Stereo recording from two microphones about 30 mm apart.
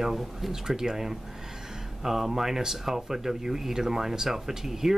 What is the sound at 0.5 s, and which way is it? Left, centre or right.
Speech, centre.